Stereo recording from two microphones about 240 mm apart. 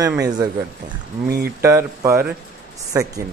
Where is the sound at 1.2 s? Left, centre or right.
Right.